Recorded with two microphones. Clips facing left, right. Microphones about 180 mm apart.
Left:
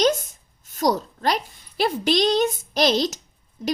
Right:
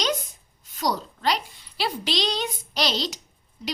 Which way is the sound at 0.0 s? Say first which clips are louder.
Left 7 dB; 45° left (ahead or behind).